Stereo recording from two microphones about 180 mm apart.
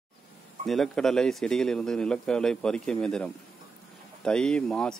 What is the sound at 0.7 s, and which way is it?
Speech, centre (ahead or behind).